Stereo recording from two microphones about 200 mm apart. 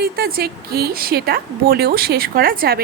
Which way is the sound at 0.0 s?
50° right (ahead or behind).